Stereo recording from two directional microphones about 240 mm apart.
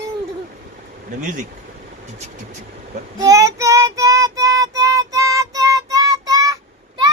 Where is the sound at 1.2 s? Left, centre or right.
Right.